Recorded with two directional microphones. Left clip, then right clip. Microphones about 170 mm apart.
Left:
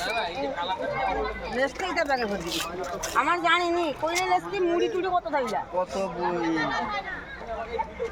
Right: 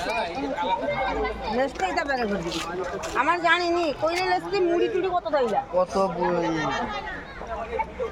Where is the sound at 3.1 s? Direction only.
20° right (ahead or behind).